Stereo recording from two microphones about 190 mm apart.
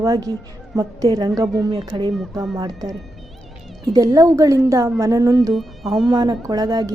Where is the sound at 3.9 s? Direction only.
20° right (ahead or behind).